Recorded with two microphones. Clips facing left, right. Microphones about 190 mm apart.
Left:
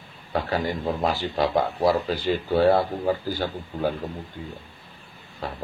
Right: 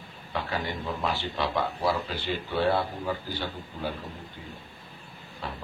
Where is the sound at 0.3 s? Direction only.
40° left (ahead or behind).